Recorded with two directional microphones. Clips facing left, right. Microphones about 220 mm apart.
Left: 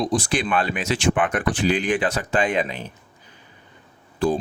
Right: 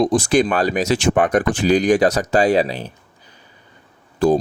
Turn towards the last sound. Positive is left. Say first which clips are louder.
# right 6 dB
turn(degrees=-45)  # may be behind; listen again after turning